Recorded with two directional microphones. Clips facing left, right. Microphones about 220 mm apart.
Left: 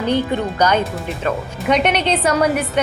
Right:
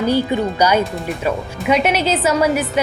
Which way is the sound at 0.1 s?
10° right (ahead or behind).